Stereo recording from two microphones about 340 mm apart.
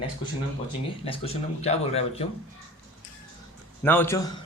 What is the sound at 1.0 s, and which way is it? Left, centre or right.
Speech, centre.